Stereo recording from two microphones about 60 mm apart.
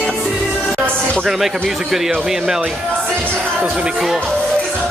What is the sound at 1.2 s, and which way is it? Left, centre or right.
Speech, centre.